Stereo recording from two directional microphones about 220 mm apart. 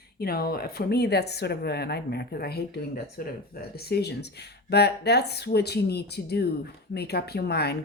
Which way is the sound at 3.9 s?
45° left (ahead or behind).